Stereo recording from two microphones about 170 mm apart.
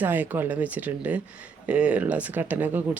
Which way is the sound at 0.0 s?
10° right (ahead or behind).